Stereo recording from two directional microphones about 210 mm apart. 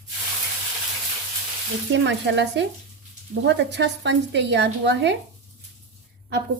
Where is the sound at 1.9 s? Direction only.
55° right (ahead or behind).